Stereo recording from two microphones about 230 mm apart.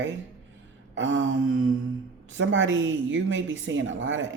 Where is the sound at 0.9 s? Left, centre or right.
Right.